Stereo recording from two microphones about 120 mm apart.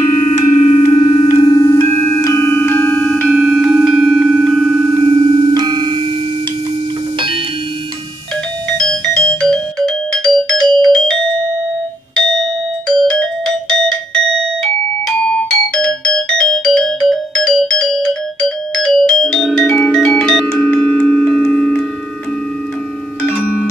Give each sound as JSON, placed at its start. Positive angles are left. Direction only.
{"t": 0.3, "sound": "music", "side_deg": 75}
{"t": 0.9, "sound": "music", "side_deg": 45}
{"t": 1.5, "sound": "music", "side_deg": 35}
{"t": 1.8, "sound": "music", "side_deg": 20}
{"t": 3.3, "sound": "tubular bells", "side_deg": -5}
{"t": 5.0, "sound": "music", "side_deg": -45}
{"t": 8.6, "sound": "music", "side_deg": 5}
{"t": 12.2, "sound": "doorbell", "side_deg": 5}